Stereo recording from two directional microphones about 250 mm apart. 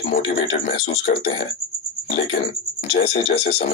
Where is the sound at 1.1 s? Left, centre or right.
Left.